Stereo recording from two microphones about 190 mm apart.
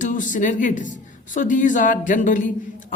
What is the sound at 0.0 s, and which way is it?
A woman's voice, 45° left (ahead or behind).